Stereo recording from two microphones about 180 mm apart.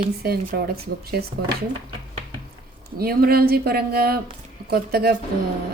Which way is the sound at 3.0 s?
55° right (ahead or behind).